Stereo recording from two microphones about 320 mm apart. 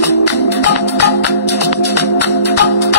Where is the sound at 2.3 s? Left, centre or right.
Left.